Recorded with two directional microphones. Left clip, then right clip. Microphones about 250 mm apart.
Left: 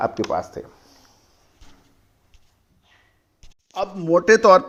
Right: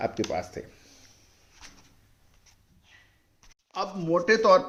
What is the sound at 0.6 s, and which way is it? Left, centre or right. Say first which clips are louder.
Speech: left 5 dB; left.